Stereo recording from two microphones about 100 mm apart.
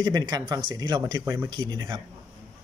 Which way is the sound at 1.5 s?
45° right (ahead or behind).